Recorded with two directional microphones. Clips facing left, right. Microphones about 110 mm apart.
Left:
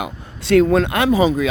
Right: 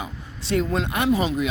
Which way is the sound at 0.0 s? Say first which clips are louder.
Left 6 dB; 85° left.